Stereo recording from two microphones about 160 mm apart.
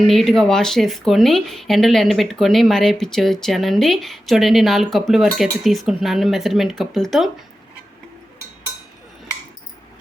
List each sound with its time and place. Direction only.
0.1 s speech: centre (ahead or behind)